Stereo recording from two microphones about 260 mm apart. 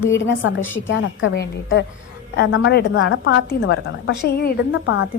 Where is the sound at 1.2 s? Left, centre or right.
Left.